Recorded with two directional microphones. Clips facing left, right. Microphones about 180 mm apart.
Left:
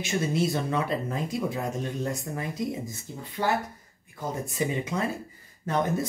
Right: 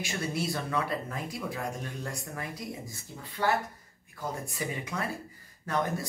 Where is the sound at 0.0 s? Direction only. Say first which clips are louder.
Left 6 dB; 20° left (ahead or behind).